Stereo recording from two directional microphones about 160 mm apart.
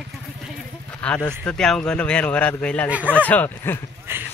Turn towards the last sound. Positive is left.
turn(degrees=-15)  # may be behind; listen again after turning